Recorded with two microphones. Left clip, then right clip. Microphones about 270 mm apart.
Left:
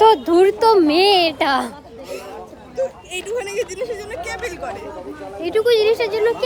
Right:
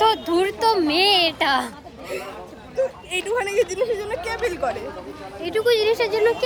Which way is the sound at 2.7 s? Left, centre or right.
Right.